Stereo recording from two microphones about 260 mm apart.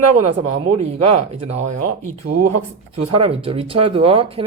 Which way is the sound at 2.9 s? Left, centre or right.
Right.